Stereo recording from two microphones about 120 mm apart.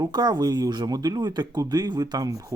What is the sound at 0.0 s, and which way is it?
Speech, 35° right (ahead or behind).